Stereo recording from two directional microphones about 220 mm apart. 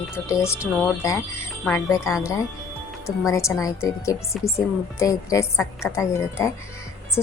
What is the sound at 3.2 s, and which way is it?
A woman's voice, 15° left (ahead or behind).